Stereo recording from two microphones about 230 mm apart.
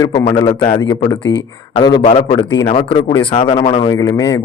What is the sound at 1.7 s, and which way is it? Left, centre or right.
Speech, centre.